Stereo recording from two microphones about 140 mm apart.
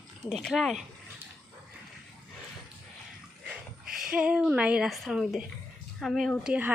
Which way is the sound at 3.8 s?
90° right.